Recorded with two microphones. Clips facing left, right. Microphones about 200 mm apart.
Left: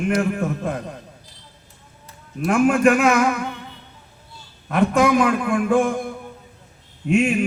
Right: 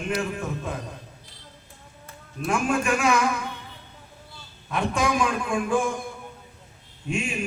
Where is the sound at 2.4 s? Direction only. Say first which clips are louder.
Left 8 dB; 60° left (ahead or behind).